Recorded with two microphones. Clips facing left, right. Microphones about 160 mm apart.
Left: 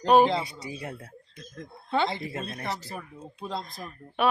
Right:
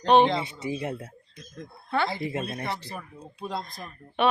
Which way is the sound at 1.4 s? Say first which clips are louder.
Right 1 dB; centre (ahead or behind).